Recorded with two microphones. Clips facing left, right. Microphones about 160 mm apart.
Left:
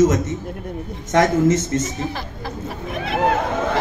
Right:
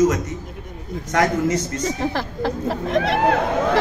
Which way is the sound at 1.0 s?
25° left (ahead or behind).